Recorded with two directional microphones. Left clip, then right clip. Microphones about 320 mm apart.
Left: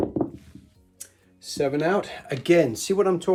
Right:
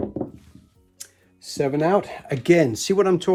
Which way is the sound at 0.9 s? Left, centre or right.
Right.